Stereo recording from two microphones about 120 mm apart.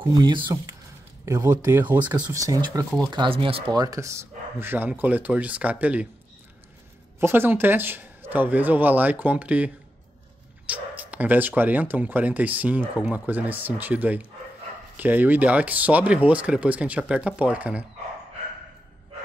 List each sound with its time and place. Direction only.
0.1 s speech: 40° right (ahead or behind)
1.2 s speech: 25° right (ahead or behind)
2.3 s speech: 30° right (ahead or behind)
3.1 s speech: 45° right (ahead or behind)
3.7 s speech: 30° right (ahead or behind); by 6.0 s 10° right (ahead or behind)
7.2 s speech: 20° right (ahead or behind)
10.7 s speech: 15° right (ahead or behind)